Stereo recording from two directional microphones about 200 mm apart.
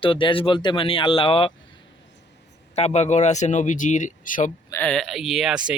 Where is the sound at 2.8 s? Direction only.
35° left (ahead or behind).